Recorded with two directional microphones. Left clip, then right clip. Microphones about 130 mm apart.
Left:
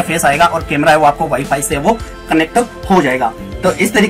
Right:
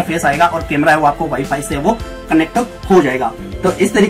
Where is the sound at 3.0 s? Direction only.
15° left (ahead or behind).